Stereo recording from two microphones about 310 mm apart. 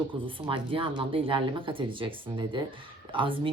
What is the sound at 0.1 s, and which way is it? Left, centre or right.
Speech, centre.